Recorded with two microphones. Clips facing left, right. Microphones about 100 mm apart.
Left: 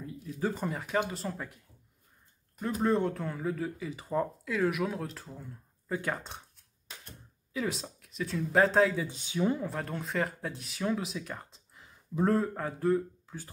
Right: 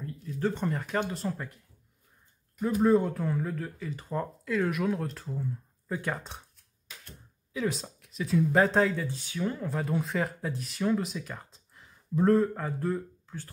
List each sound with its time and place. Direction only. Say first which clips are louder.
0.0 s speech: right 2 dB; 10° left (ahead or behind)
2.6 s speech: right 4 dB; 5° right (ahead or behind)
7.5 s speech: right 2 dB; centre (ahead or behind)
9.0 s speech: left 2 dB; 20° left (ahead or behind)
9.6 s speech: right 4 dB; centre (ahead or behind)